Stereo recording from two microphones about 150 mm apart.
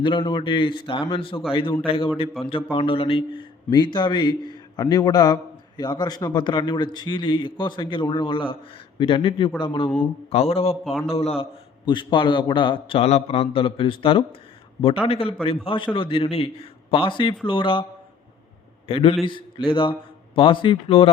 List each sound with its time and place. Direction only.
0.0 s a man's voice: 35° left (ahead or behind)
2.4 s speech: centre (ahead or behind)
2.7 s a man's voice: 35° left (ahead or behind)
18.9 s a man's voice: 40° left (ahead or behind)